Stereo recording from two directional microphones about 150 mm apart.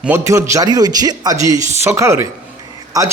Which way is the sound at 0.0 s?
15° right (ahead or behind).